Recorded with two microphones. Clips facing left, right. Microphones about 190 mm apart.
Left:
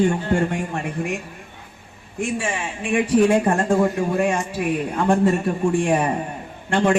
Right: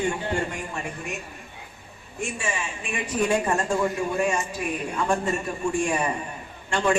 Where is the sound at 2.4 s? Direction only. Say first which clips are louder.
Left 4 dB; 60° left (ahead or behind).